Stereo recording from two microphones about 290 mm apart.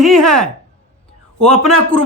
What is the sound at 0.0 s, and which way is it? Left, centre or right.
Speech, centre.